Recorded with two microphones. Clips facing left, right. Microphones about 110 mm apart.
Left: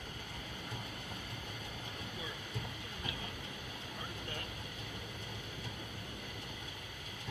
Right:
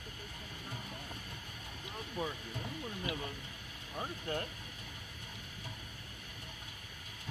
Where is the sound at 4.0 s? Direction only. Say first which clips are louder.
Right 9 dB; 40° right (ahead or behind).